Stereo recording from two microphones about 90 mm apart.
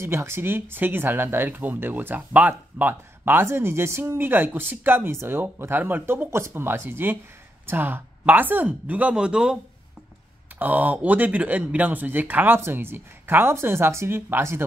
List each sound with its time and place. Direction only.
0.0 s speech: 30° right (ahead or behind); by 9.6 s 10° right (ahead or behind)
10.6 s speech: 20° right (ahead or behind)